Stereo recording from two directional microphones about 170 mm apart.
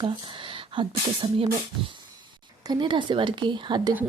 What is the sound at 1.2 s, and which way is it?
Speech, 30° right (ahead or behind).